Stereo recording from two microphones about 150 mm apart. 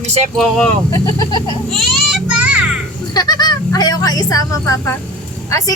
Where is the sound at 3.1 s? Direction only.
25° left (ahead or behind).